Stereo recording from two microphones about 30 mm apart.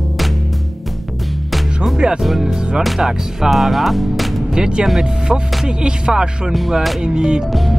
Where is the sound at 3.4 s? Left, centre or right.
Centre.